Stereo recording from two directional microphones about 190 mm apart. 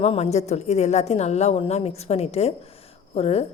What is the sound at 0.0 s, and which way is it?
A woman's voice, 35° left (ahead or behind).